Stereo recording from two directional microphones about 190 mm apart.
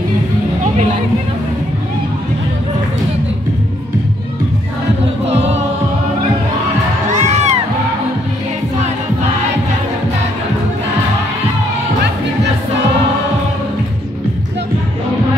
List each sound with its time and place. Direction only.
5.2 s choir: 35° right (ahead or behind)
7.1 s music: 40° right (ahead or behind)